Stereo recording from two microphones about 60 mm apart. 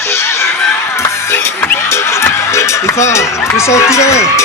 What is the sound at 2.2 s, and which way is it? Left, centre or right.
Music, left.